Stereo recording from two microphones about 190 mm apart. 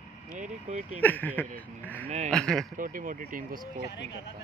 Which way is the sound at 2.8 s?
45° right (ahead or behind).